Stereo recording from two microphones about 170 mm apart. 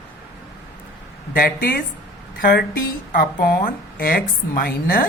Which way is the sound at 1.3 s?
60° left (ahead or behind).